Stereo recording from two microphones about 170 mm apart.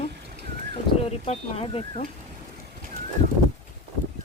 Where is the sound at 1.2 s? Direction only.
35° left (ahead or behind).